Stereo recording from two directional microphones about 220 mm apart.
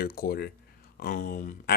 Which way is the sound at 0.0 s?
45° left (ahead or behind).